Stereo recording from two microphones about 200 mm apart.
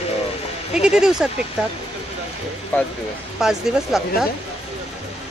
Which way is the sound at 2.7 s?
10° left (ahead or behind).